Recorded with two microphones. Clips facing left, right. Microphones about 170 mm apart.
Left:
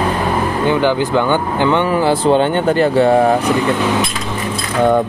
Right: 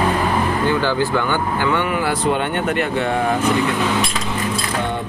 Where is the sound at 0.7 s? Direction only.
20° left (ahead or behind); by 3.3 s 35° left (ahead or behind).